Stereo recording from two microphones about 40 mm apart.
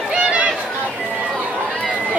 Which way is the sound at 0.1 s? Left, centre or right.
Right.